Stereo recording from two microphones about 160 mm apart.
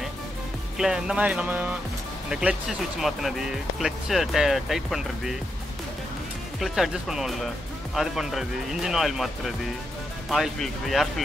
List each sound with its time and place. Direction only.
0.7 s speech: 5° right (ahead or behind)
3.0 s speech: centre (ahead or behind)
6.6 s speech: centre (ahead or behind)